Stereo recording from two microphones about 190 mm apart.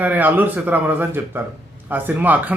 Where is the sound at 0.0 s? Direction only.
10° right (ahead or behind).